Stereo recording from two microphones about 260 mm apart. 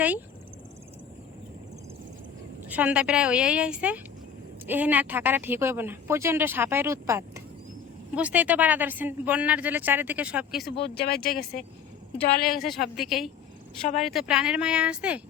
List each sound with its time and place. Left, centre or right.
2.6 s a woman's voice: centre
10.9 s speech: left
12.6 s a woman's voice: centre